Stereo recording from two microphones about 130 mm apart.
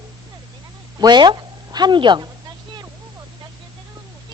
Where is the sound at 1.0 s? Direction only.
35° right (ahead or behind).